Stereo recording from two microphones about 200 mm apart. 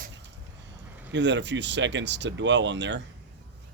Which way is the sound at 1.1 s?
60° right (ahead or behind).